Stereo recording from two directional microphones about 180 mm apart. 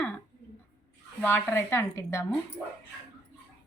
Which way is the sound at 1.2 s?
15° left (ahead or behind).